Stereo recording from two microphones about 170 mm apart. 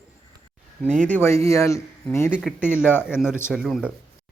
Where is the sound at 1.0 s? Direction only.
10° left (ahead or behind).